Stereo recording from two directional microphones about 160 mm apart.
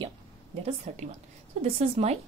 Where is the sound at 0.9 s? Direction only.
45° right (ahead or behind).